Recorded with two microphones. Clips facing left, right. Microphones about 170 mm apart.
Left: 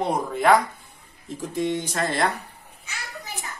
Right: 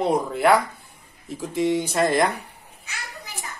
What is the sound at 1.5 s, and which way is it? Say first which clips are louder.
Speech: right 4 dB; 10° right (ahead or behind).